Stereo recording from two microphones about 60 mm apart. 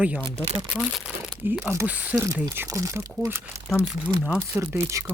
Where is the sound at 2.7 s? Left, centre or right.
Right.